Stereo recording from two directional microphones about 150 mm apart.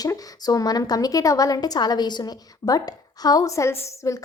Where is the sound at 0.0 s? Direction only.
25° left (ahead or behind).